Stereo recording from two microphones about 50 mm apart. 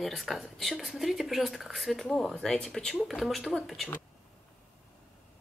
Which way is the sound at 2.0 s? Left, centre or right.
Left.